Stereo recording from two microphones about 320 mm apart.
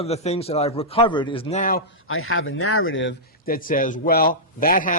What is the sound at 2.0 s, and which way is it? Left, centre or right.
Speech, left.